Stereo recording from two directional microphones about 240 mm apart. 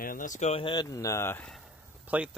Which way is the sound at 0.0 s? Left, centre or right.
Left.